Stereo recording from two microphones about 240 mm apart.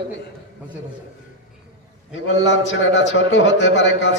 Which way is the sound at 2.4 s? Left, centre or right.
Left.